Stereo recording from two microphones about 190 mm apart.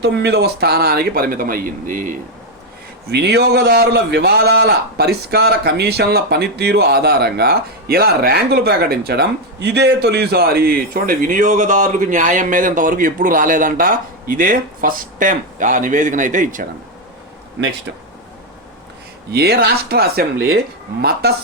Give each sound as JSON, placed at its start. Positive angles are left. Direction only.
{"t": 0.0, "sound": "a man's voice", "side_deg": -65}
{"t": 3.1, "sound": "a man's voice", "side_deg": -60}
{"t": 19.3, "sound": "speech", "side_deg": -55}